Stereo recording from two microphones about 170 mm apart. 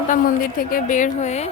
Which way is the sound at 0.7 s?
50° left (ahead or behind).